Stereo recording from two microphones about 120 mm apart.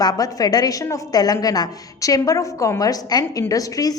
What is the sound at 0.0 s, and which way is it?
A woman's voice, 30° left (ahead or behind).